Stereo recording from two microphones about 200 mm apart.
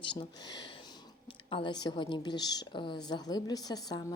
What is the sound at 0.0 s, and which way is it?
A woman's voice, 25° left (ahead or behind).